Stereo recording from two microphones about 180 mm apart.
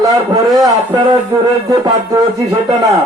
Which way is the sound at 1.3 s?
15° right (ahead or behind).